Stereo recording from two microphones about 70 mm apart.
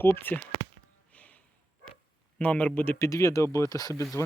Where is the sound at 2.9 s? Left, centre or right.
Left.